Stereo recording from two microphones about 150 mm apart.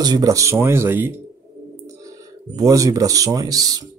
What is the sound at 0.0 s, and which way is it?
Speech, 25° right (ahead or behind).